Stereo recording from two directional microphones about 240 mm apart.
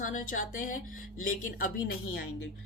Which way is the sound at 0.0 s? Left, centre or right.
Left.